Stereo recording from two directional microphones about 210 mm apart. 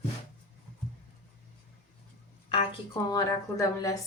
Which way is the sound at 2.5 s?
25° left (ahead or behind).